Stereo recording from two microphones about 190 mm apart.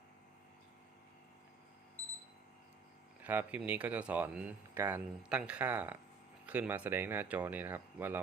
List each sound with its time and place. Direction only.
3.2 s speech: 10° right (ahead or behind)